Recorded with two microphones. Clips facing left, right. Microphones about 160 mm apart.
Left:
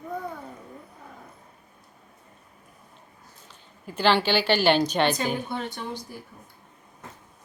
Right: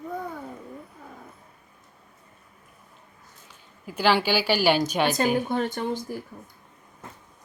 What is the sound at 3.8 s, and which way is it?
A woman's voice, 10° right (ahead or behind).